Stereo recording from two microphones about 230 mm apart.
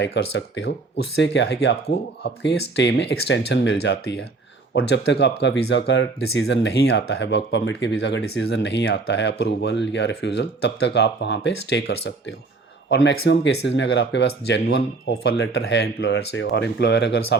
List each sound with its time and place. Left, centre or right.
0.0 s speech: left